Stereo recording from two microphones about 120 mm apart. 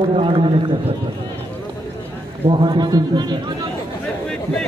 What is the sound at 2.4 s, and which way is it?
A man's voice, 45° right (ahead or behind).